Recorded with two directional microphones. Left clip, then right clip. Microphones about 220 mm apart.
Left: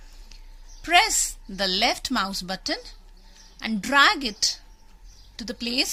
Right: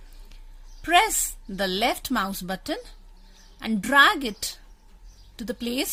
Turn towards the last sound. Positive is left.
turn(degrees=-40)  # may be behind; listen again after turning